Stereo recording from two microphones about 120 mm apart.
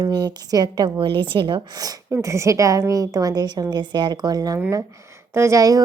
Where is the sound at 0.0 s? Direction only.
35° right (ahead or behind).